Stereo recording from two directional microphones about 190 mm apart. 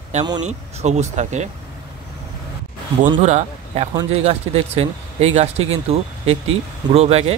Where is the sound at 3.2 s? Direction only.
40° right (ahead or behind).